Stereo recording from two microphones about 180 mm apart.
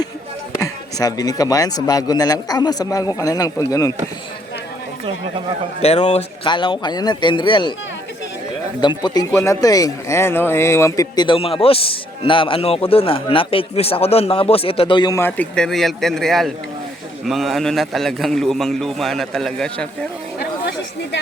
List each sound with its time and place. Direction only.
0.5 s speech: 20° left (ahead or behind)
5.8 s speech: 35° left (ahead or behind)
8.8 s speech: 25° left (ahead or behind)
15.3 s a man's voice: 5° left (ahead or behind)